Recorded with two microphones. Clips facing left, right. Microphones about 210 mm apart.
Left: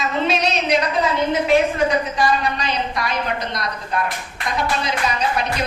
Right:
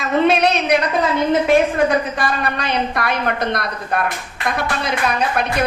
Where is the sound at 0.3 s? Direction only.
55° right (ahead or behind).